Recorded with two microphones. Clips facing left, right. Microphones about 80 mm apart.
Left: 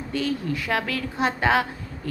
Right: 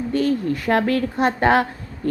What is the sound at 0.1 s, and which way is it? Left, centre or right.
A woman's voice, right.